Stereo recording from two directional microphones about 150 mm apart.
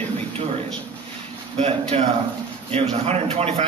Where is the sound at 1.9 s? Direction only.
40° right (ahead or behind).